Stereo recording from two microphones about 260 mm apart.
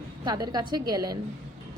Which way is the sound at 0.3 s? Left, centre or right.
Centre.